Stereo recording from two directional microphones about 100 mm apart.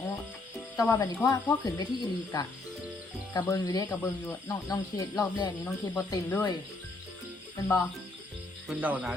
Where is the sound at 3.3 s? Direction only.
40° left (ahead or behind).